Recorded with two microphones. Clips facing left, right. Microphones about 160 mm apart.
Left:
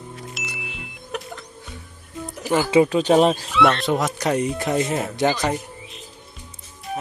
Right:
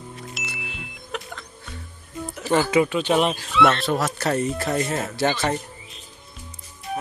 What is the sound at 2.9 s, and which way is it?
Speech, 35° left (ahead or behind).